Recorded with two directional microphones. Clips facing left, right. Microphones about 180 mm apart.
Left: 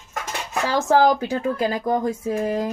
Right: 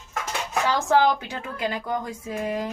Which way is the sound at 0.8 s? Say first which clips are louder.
Left 5 dB; 40° left (ahead or behind).